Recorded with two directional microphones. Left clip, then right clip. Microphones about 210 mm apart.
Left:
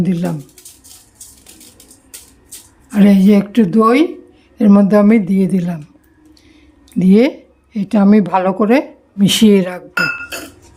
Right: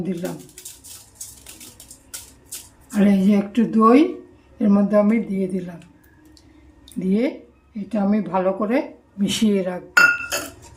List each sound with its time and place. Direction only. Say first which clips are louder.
0.0 s speech: left 7 dB; 50° left (ahead or behind)
2.9 s speech: left 7 dB; 45° left (ahead or behind)
7.0 s speech: left 10 dB; 50° left (ahead or behind)